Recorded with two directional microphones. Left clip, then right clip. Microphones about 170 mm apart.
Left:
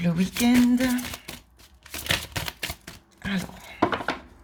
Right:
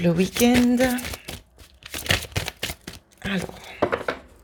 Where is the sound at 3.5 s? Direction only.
35° right (ahead or behind).